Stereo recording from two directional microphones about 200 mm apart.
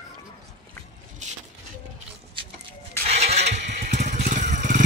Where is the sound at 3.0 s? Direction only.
35° right (ahead or behind).